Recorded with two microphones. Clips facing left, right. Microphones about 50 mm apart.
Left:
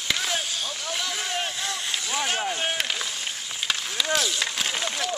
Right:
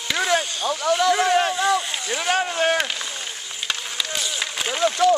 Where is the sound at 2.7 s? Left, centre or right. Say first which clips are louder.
Right 5 dB; centre.